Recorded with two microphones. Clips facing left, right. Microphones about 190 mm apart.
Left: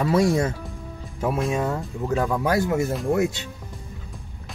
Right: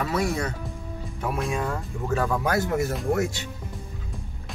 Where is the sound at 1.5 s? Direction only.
20° left (ahead or behind).